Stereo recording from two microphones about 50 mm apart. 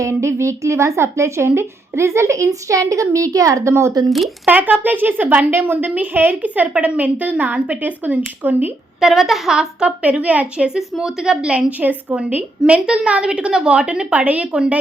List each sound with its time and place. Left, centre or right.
0.0 s a woman's voice: right
4.4 s speech: right
5.5 s a woman's voice: right
6.4 s speech: right
9.0 s a woman's voice: centre
9.6 s a woman's voice: right
10.8 s a woman's voice: centre
11.8 s a woman's voice: right